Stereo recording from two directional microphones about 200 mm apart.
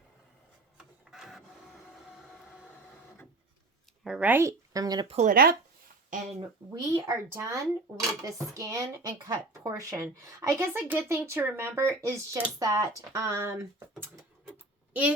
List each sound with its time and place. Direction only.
0.8 s printer: centre (ahead or behind)
4.0 s speech: 5° right (ahead or behind)
5.1 s speech: 40° right (ahead or behind)
6.7 s speech: 15° right (ahead or behind)